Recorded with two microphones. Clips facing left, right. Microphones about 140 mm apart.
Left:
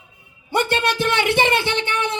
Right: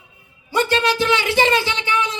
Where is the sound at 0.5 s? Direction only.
55° left (ahead or behind).